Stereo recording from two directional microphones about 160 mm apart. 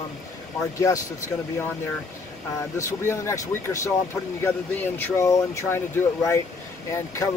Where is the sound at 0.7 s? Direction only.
20° left (ahead or behind).